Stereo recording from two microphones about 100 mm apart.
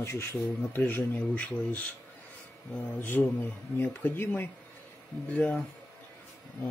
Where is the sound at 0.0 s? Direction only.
25° left (ahead or behind).